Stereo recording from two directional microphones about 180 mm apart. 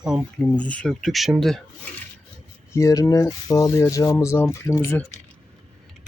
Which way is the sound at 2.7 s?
20° left (ahead or behind).